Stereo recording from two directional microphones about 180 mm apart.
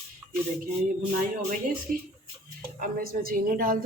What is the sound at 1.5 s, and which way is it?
A woman's voice, 50° right (ahead or behind).